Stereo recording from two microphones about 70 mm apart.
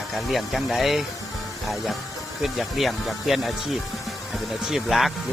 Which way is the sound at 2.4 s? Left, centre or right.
Centre.